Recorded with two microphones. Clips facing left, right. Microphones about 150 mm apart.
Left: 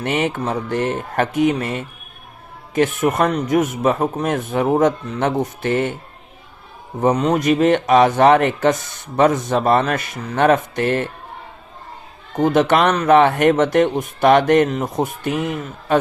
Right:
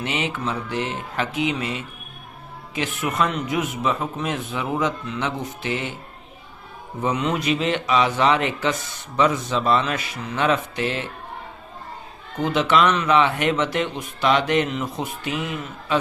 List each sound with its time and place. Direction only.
0.0 s speech: 50° left (ahead or behind)
7.0 s speech: 40° left (ahead or behind)
12.4 s speech: 45° left (ahead or behind)